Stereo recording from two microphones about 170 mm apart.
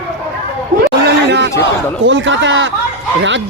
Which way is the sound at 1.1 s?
90° right.